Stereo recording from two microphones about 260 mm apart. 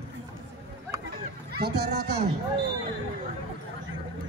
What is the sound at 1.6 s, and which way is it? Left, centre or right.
Speech, right.